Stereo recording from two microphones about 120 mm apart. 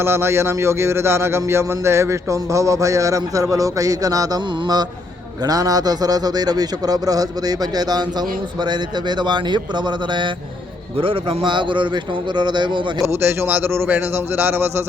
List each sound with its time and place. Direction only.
0.0 s a man's voice: 20° right (ahead or behind); by 12.8 s 40° right (ahead or behind)
13.0 s speech: 20° right (ahead or behind)